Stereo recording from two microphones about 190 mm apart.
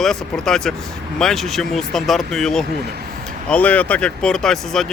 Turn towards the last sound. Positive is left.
turn(degrees=0)  # may be behind; listen again after turning